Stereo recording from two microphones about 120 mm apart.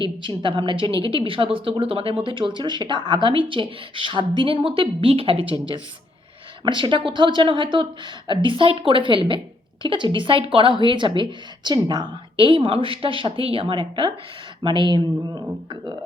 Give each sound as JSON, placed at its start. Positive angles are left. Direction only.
{"t": 0.0, "sound": "a woman's voice", "side_deg": -45}
{"t": 6.7, "sound": "a woman's voice", "side_deg": -40}